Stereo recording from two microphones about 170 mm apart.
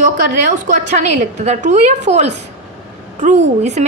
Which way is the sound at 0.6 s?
45° right (ahead or behind).